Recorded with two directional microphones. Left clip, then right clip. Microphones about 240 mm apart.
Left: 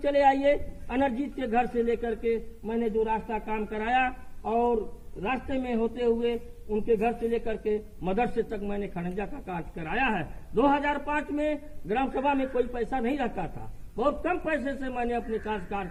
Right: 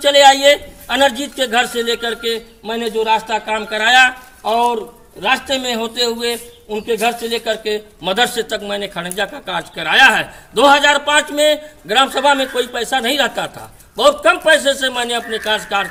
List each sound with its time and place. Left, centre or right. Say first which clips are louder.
0.0 s a man's voice: right 14 dB; right